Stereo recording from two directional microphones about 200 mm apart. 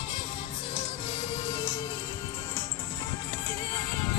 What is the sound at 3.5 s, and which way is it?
Music, 20° left (ahead or behind).